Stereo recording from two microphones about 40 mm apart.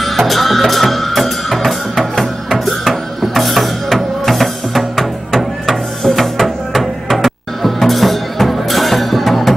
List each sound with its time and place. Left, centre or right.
0.3 s music: centre